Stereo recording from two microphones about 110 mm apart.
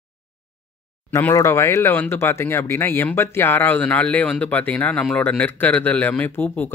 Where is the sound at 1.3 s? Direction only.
25° left (ahead or behind).